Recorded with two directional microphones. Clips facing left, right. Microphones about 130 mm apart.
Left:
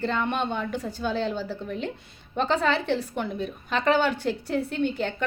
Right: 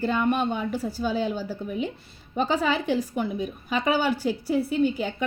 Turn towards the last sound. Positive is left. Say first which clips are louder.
# right 3 dB
turn(degrees=-5)  # may be behind; listen again after turning